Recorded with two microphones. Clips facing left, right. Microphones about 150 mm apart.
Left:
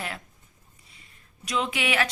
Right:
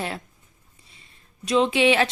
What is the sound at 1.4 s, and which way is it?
Speech, 30° right (ahead or behind).